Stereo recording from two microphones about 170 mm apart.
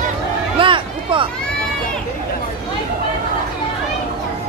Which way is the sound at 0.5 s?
30° right (ahead or behind).